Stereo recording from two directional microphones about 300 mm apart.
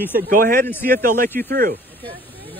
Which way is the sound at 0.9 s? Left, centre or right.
Right.